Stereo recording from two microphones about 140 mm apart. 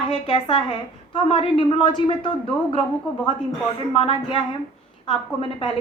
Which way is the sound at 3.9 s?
35° left (ahead or behind).